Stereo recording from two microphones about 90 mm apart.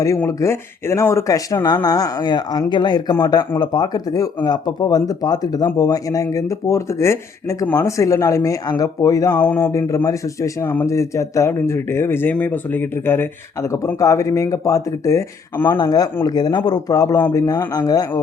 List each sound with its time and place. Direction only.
0.3 s speech: 30° left (ahead or behind)
9.4 s speech: 15° left (ahead or behind)
9.7 s speech: 35° left (ahead or behind)
15.5 s speech: 25° left (ahead or behind)
15.8 s speech: 45° left (ahead or behind)